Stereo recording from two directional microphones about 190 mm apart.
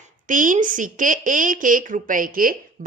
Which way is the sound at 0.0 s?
45° right (ahead or behind).